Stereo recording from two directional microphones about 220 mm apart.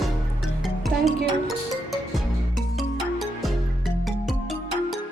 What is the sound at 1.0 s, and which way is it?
Music, centre (ahead or behind).